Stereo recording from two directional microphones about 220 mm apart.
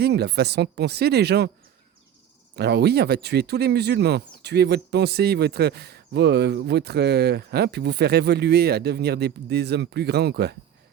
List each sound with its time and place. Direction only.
0.0 s speech: 50° right (ahead or behind)
2.6 s speech: 50° right (ahead or behind)